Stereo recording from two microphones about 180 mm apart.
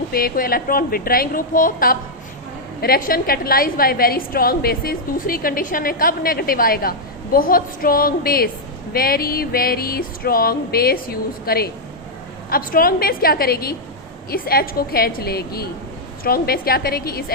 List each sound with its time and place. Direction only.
0.1 s a woman's voice: 55° left (ahead or behind)